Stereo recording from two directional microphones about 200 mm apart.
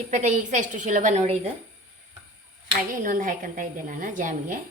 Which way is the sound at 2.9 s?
40° right (ahead or behind).